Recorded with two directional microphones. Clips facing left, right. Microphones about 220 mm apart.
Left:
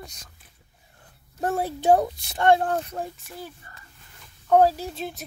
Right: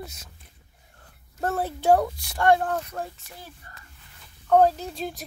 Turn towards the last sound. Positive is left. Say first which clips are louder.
# even
turn(degrees=5)  # may be behind; listen again after turning